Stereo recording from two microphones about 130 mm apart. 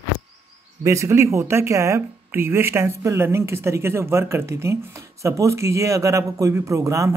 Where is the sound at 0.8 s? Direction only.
20° right (ahead or behind).